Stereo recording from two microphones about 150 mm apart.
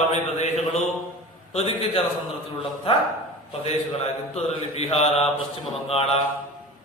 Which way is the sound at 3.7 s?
45° left (ahead or behind).